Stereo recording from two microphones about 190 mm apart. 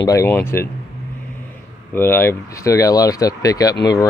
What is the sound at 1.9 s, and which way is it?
Speech, 10° left (ahead or behind).